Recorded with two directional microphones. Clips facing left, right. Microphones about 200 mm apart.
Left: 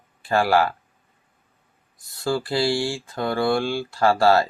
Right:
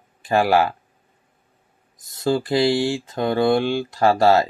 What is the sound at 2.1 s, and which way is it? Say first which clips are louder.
Speech: right 4 dB; 20° right (ahead or behind).